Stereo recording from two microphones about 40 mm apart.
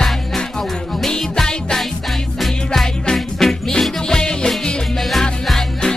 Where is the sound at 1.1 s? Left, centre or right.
Centre.